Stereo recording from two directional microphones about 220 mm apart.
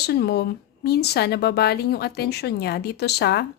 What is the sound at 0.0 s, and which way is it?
Speech, 50° left (ahead or behind).